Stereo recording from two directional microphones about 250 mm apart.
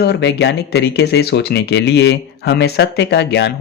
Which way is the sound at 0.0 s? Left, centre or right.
Left.